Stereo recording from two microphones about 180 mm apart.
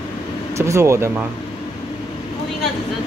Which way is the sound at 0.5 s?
15° right (ahead or behind).